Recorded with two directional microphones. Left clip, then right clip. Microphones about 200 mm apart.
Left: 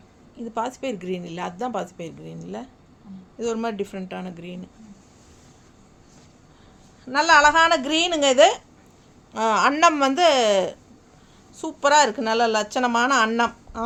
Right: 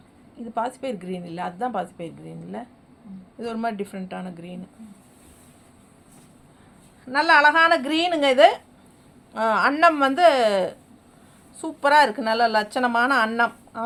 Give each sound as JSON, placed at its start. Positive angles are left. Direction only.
{"t": 0.5, "sound": "speech", "side_deg": 30}
{"t": 7.0, "sound": "speech", "side_deg": 25}